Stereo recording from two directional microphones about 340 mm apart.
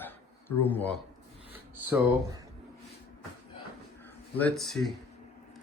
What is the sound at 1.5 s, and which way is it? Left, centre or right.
Speech, centre.